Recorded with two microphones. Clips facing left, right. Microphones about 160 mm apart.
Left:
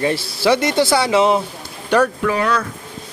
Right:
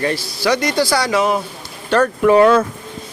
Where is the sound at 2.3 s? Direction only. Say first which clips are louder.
Right 8 dB; 30° right (ahead or behind).